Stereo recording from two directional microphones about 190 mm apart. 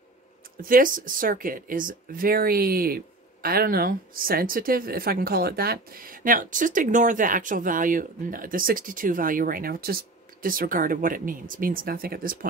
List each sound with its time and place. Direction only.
0.6 s speech: 45° right (ahead or behind)